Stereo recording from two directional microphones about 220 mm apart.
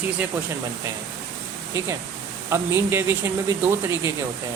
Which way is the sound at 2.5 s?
10° right (ahead or behind).